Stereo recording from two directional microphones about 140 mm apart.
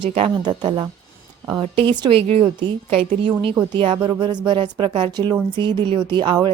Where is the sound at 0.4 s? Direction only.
35° right (ahead or behind).